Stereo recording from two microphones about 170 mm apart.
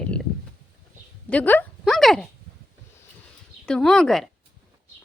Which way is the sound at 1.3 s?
10° left (ahead or behind).